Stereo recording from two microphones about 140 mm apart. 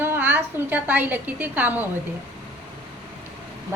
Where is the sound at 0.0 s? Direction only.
15° right (ahead or behind).